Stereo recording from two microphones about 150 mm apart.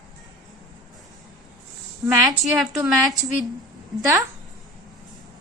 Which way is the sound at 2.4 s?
Centre (ahead or behind).